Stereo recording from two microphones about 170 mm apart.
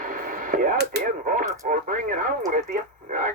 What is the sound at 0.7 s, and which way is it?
Radio, 75° right (ahead or behind).